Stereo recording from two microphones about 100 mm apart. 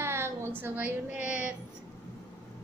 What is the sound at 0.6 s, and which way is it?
Speech, 15° right (ahead or behind).